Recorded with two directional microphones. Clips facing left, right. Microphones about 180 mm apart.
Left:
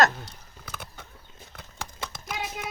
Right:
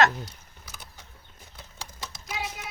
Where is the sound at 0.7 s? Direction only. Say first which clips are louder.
Left 7 dB; 60° left (ahead or behind).